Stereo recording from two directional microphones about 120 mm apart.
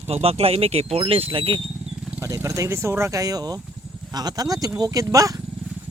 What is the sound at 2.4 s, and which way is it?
Speech, 25° right (ahead or behind).